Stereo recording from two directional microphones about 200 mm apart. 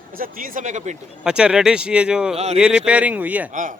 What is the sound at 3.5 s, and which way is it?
Speech, 40° right (ahead or behind).